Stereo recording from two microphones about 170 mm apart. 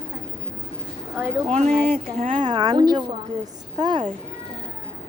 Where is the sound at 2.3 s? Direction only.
25° right (ahead or behind).